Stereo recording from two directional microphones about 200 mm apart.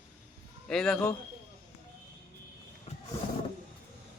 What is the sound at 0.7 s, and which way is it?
Speech, centre (ahead or behind).